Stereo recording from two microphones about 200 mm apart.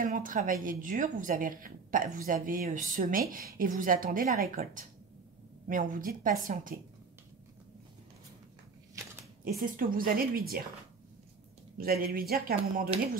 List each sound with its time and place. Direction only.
0.0 s a woman's voice: 40° right (ahead or behind)
9.6 s a woman's voice: 45° right (ahead or behind)
11.8 s a woman's voice: 50° right (ahead or behind)